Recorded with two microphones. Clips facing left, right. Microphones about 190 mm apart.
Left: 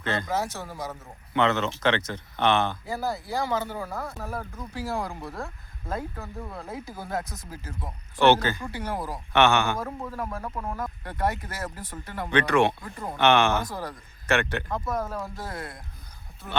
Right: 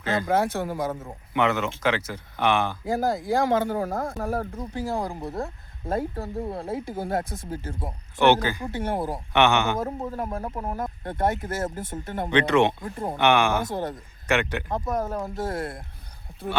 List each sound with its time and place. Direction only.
0.0 s speech: 5° right (ahead or behind)
0.3 s speech: 55° right (ahead or behind)
1.3 s speech: 10° right (ahead or behind)
2.8 s speech: 50° right (ahead or behind)
4.5 s speech: 20° right (ahead or behind)
6.1 s speech: 30° right (ahead or behind)
8.2 s speech: 15° right (ahead or behind); by 13.1 s 30° right (ahead or behind)
13.1 s speech: 15° right (ahead or behind)
13.7 s speech: 25° right (ahead or behind)
15.5 s speech: 55° right (ahead or behind)